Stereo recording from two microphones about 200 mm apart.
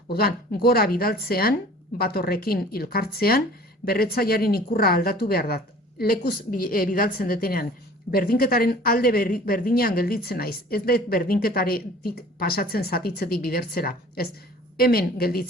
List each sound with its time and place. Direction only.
0.1 s speech: 50° left (ahead or behind)